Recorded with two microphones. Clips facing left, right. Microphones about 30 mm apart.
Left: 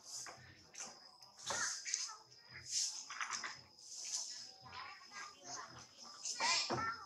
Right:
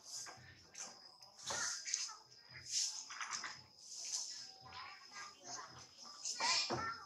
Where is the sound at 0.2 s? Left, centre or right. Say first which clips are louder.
Left 1 dB; centre.